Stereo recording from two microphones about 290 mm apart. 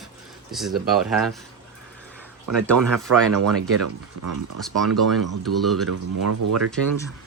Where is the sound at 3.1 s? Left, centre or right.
Right.